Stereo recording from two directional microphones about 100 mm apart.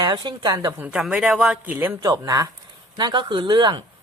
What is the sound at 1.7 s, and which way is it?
Speech, 20° right (ahead or behind).